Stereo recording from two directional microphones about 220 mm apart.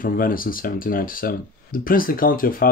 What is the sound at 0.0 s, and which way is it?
Speech, 40° left (ahead or behind).